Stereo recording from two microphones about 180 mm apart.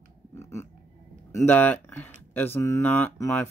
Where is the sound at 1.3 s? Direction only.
10° left (ahead or behind).